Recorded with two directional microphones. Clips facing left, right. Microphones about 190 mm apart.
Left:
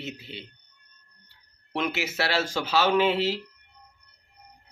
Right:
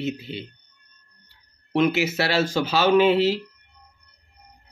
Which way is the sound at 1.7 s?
10° right (ahead or behind).